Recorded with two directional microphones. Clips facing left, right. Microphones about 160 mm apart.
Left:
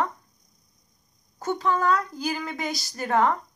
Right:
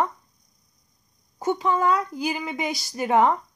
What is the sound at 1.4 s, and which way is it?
Speech, 15° right (ahead or behind).